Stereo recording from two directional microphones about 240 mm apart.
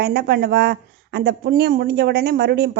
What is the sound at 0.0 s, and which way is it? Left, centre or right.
A woman's voice, right.